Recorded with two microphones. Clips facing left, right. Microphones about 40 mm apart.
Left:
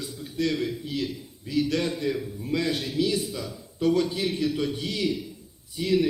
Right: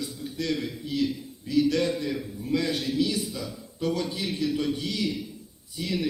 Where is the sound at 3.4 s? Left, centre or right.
Centre.